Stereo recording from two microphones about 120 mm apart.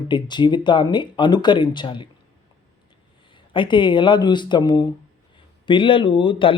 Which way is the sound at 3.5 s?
40° left (ahead or behind).